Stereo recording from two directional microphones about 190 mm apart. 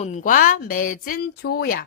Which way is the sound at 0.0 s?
40° left (ahead or behind).